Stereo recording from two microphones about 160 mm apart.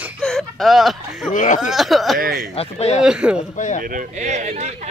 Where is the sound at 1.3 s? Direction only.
50° left (ahead or behind).